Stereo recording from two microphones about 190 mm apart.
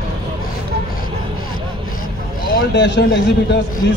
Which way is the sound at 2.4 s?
50° left (ahead or behind).